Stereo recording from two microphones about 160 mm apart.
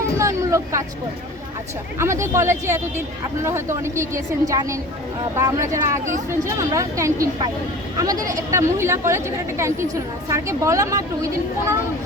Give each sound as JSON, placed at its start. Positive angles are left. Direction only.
{"t": 0.2, "sound": "speech", "side_deg": -20}
{"t": 2.0, "sound": "speech", "side_deg": -15}